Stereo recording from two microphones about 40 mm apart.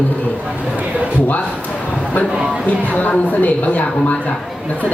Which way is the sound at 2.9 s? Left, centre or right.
Left.